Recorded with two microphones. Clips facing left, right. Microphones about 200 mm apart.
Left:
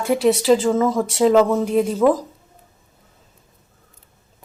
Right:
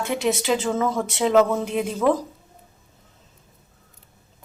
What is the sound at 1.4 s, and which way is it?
Speech, 40° left (ahead or behind).